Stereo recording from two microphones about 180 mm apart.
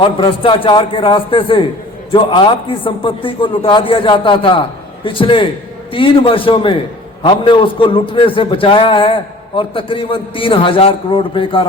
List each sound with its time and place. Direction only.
0.2 s a man's voice: 30° left (ahead or behind)